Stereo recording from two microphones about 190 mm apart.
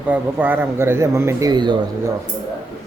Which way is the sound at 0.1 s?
10° right (ahead or behind).